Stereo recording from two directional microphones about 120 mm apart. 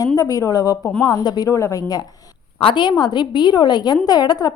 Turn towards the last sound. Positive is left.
turn(degrees=35)  # may be behind; listen again after turning